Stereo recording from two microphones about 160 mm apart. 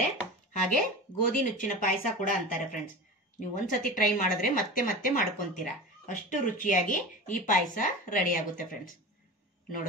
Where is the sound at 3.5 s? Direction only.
55° left (ahead or behind).